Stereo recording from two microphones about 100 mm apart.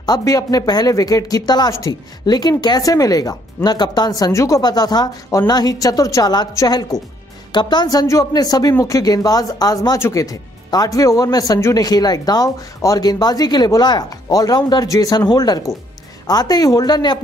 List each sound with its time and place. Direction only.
0.0 s speech: 40° left (ahead or behind)